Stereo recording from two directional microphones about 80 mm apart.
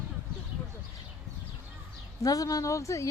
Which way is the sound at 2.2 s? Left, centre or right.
Left.